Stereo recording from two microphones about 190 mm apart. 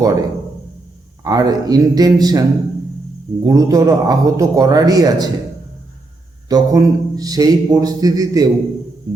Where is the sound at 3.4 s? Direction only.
20° right (ahead or behind).